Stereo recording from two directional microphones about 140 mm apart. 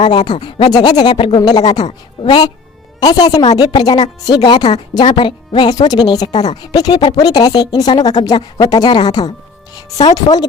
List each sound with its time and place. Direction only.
0.0 s a woman's voice: 35° left (ahead or behind)